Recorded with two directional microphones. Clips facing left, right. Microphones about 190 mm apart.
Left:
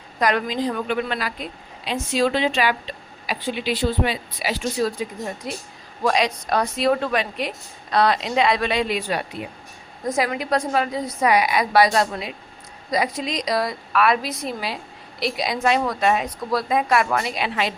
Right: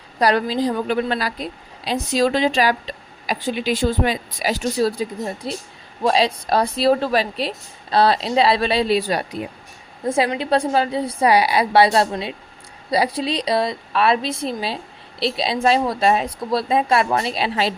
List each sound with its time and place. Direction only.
0.2 s a woman's voice: 35° right (ahead or behind)